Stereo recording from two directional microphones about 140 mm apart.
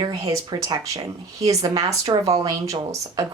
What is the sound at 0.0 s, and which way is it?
Speech, 30° right (ahead or behind).